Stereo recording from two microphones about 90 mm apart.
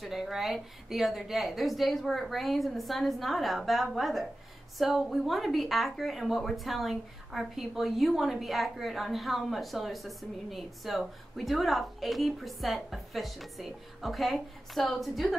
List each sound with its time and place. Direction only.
0.0 s speech: 5° right (ahead or behind)